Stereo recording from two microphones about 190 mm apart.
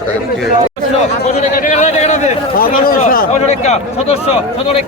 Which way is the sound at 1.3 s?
40° left (ahead or behind).